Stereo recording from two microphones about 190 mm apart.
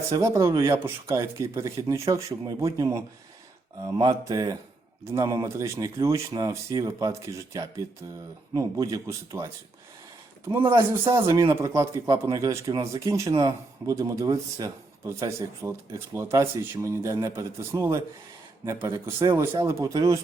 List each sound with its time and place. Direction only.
0.1 s speech: 15° right (ahead or behind)
10.7 s speech: 15° right (ahead or behind)